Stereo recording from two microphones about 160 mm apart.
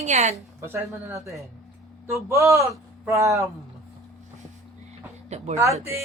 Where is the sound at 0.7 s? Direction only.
15° right (ahead or behind).